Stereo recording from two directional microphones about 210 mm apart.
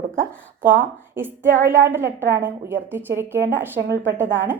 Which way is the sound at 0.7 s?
10° right (ahead or behind).